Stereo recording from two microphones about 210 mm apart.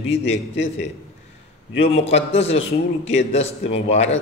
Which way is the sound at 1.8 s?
30° left (ahead or behind).